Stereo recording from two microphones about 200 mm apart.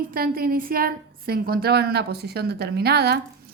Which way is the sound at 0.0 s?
45° right (ahead or behind).